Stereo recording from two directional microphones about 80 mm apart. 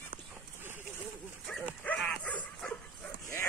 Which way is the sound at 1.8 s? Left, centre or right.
Centre.